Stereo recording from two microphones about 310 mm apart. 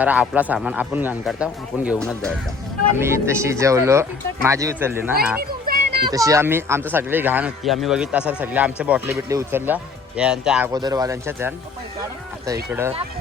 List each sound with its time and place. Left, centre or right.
0.0 s speech: centre
3.0 s speech: centre
5.4 s a sound: right
6.1 s speech: centre